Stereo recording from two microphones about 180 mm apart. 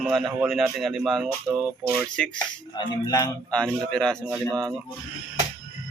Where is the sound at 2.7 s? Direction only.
20° left (ahead or behind).